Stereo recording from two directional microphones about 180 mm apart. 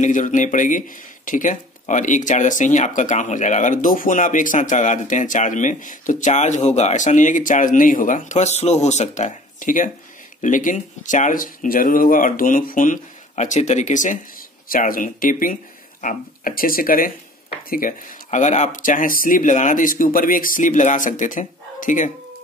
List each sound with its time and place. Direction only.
0.0 s speech: 45° left (ahead or behind)